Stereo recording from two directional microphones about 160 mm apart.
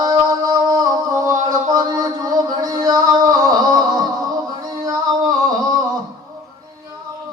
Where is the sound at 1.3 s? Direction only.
25° right (ahead or behind).